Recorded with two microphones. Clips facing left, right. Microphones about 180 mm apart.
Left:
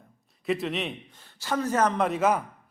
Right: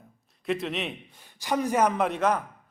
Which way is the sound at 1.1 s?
15° right (ahead or behind).